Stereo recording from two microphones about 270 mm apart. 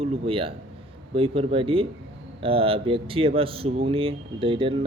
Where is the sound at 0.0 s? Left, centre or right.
Right.